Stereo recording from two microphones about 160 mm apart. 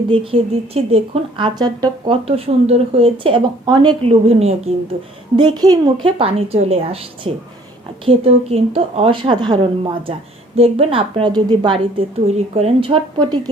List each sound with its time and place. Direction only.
0.1 s speech: 35° right (ahead or behind)
2.2 s speech: 40° right (ahead or behind)
5.4 s speech: 25° right (ahead or behind)